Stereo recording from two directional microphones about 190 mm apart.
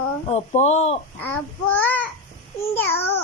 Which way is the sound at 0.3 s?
35° left (ahead or behind).